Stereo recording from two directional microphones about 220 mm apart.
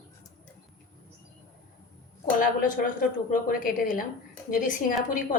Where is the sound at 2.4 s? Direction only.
40° left (ahead or behind).